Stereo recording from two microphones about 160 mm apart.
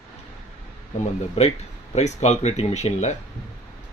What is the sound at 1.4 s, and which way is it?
A man's voice, 40° left (ahead or behind).